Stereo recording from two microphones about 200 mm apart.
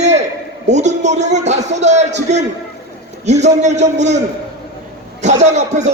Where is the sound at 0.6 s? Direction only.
35° right (ahead or behind).